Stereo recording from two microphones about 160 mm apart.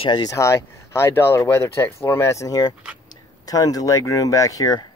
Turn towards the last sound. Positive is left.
turn(degrees=20)  # may be behind; listen again after turning